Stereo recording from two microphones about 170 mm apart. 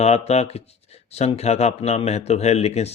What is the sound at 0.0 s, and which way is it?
Speech, 40° left (ahead or behind).